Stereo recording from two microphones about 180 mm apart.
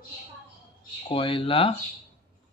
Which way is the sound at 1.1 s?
30° left (ahead or behind).